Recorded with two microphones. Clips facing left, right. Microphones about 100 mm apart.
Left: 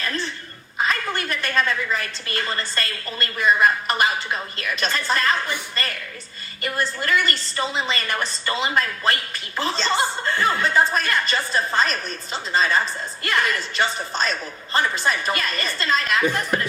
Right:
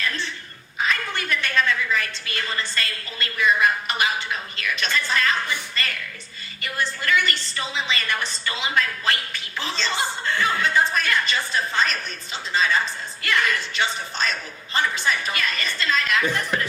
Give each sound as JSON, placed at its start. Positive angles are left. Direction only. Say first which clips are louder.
{"t": 0.8, "sound": "a woman's voice", "louder": "left 2 dB", "side_deg": 40}
{"t": 7.0, "sound": "a woman's voice", "louder": "right 1 dB", "side_deg": 40}